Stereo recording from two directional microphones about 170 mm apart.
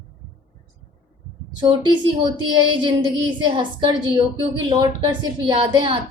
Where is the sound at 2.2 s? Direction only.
30° right (ahead or behind).